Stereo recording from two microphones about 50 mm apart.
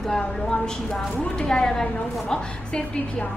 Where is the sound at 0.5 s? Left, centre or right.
Centre.